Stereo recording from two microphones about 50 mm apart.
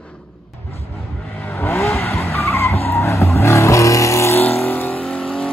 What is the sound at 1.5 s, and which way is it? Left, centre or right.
Vehicle, left.